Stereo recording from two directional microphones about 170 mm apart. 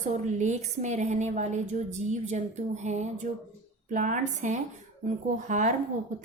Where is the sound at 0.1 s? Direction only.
45° right (ahead or behind).